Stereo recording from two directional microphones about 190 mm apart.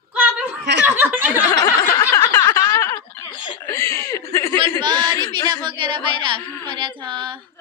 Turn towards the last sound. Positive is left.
turn(degrees=-25)  # may be behind; listen again after turning